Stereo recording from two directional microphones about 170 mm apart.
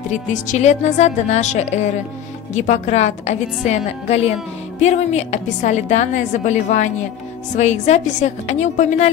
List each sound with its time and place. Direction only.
0.3 s a woman's voice: 45° left (ahead or behind)